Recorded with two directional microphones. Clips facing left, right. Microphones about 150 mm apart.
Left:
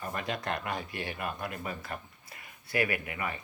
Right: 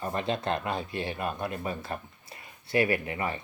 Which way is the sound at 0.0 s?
30° right (ahead or behind).